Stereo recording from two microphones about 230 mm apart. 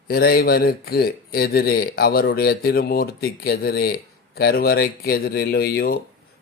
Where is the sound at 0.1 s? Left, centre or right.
Left.